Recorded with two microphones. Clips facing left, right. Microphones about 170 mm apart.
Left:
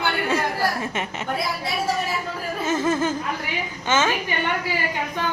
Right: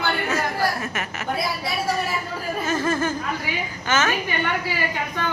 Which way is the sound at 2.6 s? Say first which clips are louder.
Left 2 dB; 20° left (ahead or behind).